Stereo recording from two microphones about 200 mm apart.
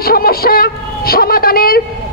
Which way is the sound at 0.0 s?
50° left (ahead or behind).